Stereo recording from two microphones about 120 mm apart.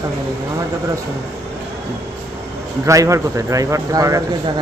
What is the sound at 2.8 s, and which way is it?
Speech, 25° right (ahead or behind).